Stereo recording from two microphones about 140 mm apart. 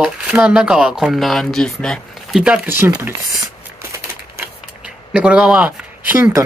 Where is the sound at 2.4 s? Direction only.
10° right (ahead or behind).